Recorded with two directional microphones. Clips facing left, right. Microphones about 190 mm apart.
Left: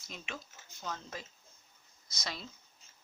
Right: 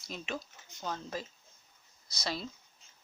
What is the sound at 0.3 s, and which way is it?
Speech, 35° right (ahead or behind).